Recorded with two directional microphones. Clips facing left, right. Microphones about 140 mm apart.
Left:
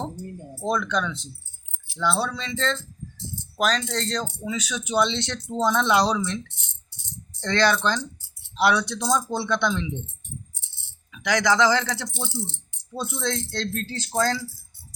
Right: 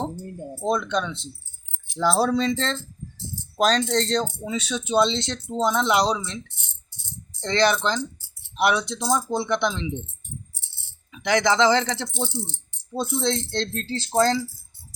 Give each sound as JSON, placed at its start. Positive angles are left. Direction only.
{"t": 0.6, "sound": "speech", "side_deg": -25}
{"t": 2.0, "sound": "speech", "side_deg": -40}
{"t": 7.4, "sound": "speech", "side_deg": -20}
{"t": 11.1, "sound": "speech", "side_deg": -25}